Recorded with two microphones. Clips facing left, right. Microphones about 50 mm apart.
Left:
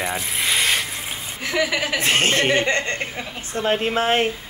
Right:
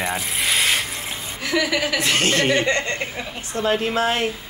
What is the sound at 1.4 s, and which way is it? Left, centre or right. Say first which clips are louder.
A woman's voice: right 1 dB; left.